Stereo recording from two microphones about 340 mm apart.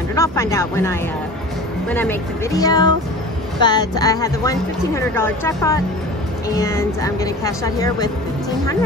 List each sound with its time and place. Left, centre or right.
0.1 s speech: centre